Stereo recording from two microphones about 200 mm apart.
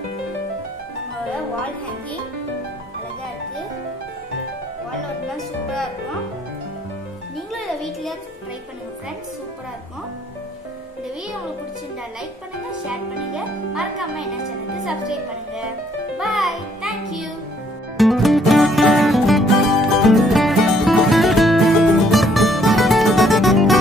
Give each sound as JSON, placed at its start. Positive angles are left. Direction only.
{"t": 7.5, "sound": "a child's voice", "side_deg": 0}
{"t": 13.7, "sound": "a child's voice", "side_deg": 0}
{"t": 16.2, "sound": "music", "side_deg": 0}